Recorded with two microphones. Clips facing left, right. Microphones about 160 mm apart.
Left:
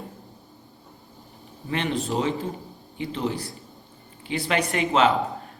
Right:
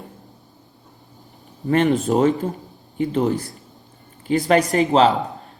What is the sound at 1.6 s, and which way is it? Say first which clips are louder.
Speech: right 9 dB; 45° right (ahead or behind).